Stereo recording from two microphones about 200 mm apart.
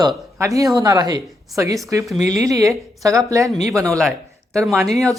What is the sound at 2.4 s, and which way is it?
Speech, 15° right (ahead or behind).